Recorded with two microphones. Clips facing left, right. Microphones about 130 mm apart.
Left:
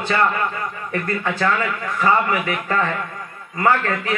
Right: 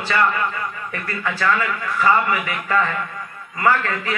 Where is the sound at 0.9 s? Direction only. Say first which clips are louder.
Left 7 dB; 45° left (ahead or behind).